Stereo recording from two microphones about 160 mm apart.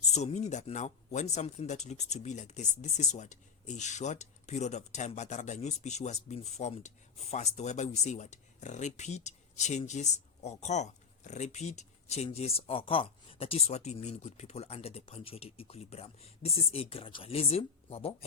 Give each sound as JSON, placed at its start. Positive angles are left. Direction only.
{"t": 0.0, "sound": "speech", "side_deg": 45}